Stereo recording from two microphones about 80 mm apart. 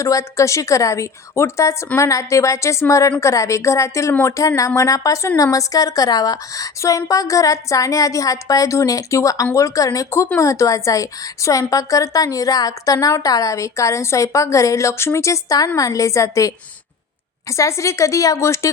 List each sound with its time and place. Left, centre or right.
0.0 s a woman's voice: left
17.6 s a woman's voice: left